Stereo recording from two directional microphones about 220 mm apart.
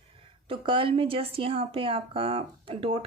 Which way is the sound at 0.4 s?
25° right (ahead or behind).